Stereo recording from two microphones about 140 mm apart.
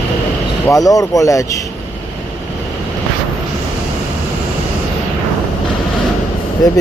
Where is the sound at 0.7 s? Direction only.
25° left (ahead or behind).